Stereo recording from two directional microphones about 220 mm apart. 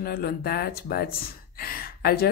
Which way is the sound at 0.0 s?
45° left (ahead or behind).